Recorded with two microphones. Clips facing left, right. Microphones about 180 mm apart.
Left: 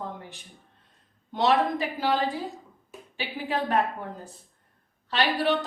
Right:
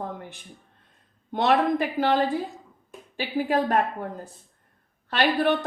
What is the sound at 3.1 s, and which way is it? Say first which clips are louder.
Speech: right 6 dB; 45° right (ahead or behind).